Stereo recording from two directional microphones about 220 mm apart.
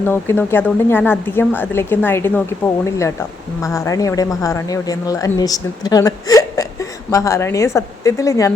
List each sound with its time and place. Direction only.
0.0 s a woman's voice: 10° left (ahead or behind)
3.6 s a woman's voice: 15° left (ahead or behind)